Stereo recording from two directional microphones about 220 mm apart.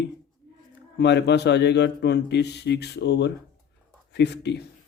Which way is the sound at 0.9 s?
50° left (ahead or behind).